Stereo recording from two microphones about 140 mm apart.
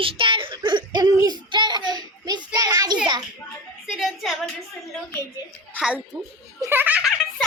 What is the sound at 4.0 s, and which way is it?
Speech, centre (ahead or behind).